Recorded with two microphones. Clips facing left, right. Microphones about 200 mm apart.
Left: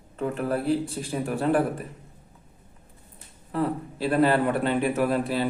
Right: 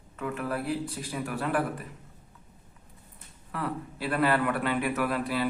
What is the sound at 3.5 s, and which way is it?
A man's voice, 30° left (ahead or behind).